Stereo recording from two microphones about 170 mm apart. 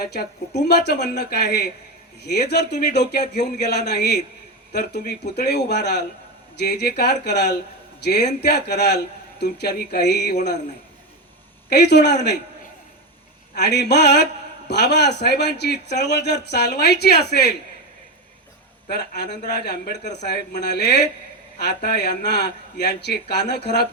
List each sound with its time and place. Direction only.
0.0 s a man's voice: 65° left (ahead or behind); by 1.2 s 85° left
1.2 s a man's voice: 70° left (ahead or behind)
8.2 s speech: 45° left (ahead or behind)
8.4 s a man's voice: 75° left (ahead or behind)
11.7 s a man's voice: 80° left
13.6 s a man's voice: 80° left
18.9 s a man's voice: 75° left (ahead or behind)